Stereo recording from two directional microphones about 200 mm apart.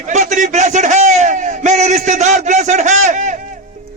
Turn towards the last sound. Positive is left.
turn(degrees=-35)  # may be behind; listen again after turning